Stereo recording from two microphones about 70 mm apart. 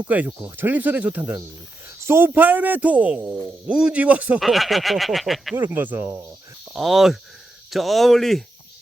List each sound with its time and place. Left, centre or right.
0.0 s speech: right
2.0 s speech: right
4.4 s speech: centre
5.5 s speech: right
6.7 s speech: centre